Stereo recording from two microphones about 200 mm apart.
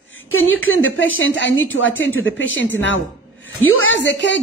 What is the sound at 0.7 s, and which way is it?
A woman's voice, 80° left.